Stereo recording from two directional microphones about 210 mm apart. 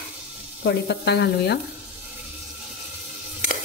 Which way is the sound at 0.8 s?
55° left (ahead or behind).